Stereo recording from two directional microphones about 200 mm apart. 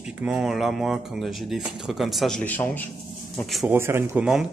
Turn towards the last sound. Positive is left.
turn(degrees=-5)  # may be behind; listen again after turning